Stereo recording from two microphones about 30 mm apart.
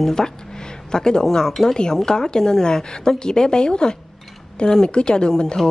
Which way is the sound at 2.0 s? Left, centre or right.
Left.